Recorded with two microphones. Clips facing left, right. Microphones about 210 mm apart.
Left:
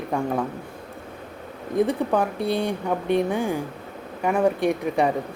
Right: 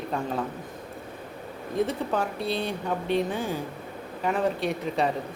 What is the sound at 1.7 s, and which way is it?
Speech, 15° left (ahead or behind).